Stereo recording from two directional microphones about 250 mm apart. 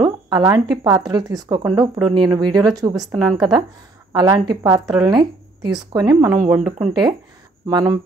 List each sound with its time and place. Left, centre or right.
0.0 s a sound: centre
0.8 s speech: centre
3.0 s a woman's voice: centre
4.1 s speech: centre